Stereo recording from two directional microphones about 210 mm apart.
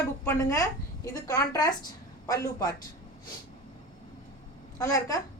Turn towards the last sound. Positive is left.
turn(degrees=15)  # may be behind; listen again after turning